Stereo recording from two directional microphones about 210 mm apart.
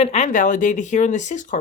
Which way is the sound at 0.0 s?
30° left (ahead or behind).